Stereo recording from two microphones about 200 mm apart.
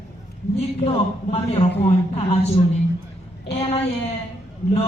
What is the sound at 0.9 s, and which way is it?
Speech, 30° left (ahead or behind).